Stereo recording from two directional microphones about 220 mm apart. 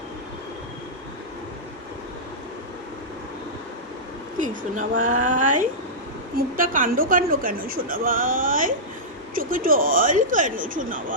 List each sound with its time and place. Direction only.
4.4 s speech: 35° right (ahead or behind)